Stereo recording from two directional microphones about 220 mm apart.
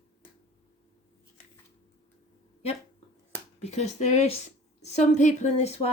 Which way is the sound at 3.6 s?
30° left (ahead or behind).